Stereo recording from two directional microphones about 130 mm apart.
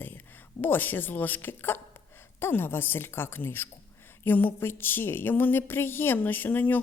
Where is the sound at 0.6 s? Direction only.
15° left (ahead or behind).